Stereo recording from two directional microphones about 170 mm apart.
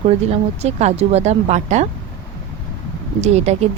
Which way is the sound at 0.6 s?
40° right (ahead or behind).